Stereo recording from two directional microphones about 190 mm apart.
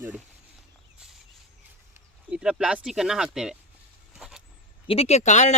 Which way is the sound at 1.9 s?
5° right (ahead or behind).